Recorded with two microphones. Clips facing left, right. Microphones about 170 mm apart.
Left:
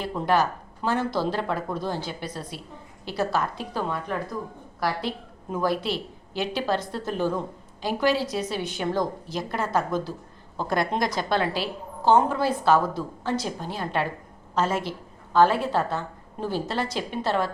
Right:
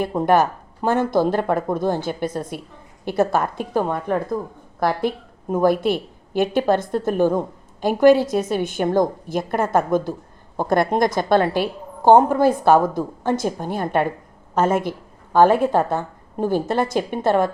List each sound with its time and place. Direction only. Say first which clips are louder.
0.0 s a woman's voice: right 6 dB; 50° right (ahead or behind)